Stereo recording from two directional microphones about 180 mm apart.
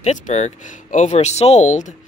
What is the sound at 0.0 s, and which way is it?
Speech, 40° left (ahead or behind).